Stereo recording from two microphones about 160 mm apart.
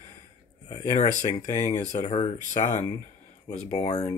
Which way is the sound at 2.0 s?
45° left (ahead or behind).